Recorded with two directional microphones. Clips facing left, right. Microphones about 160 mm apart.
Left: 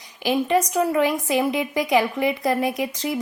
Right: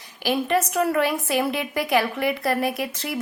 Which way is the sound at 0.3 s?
15° left (ahead or behind).